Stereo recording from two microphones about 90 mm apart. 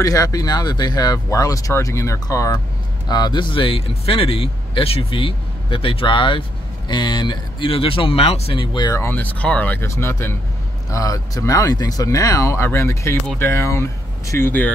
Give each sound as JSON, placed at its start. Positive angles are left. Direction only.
{"t": 0.0, "sound": "speech", "side_deg": 40}
{"t": 3.1, "sound": "speech", "side_deg": 50}
{"t": 6.9, "sound": "speech", "side_deg": 55}
{"t": 8.9, "sound": "speech", "side_deg": 25}
{"t": 9.8, "sound": "speech", "side_deg": 30}
{"t": 10.9, "sound": "speech", "side_deg": 40}